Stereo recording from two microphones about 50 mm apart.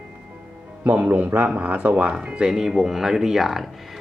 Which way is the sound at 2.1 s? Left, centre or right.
Centre.